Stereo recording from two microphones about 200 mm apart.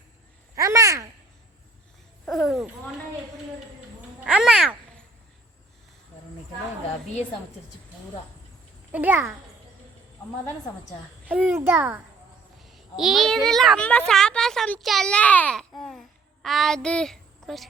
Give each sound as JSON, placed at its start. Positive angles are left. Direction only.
{"t": 0.5, "sound": "a sound", "side_deg": -15}
{"t": 2.2, "sound": "speech", "side_deg": 0}
{"t": 4.2, "sound": "a child's voice", "side_deg": -5}
{"t": 8.9, "sound": "a child's voice", "side_deg": -10}
{"t": 11.3, "sound": "a child's voice", "side_deg": -10}